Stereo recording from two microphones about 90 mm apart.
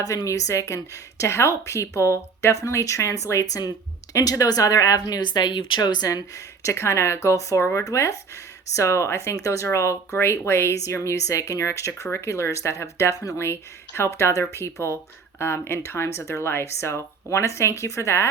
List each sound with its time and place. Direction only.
0.0 s speech: 40° left (ahead or behind); by 6.1 s 55° left (ahead or behind)
6.1 s speech: 40° left (ahead or behind)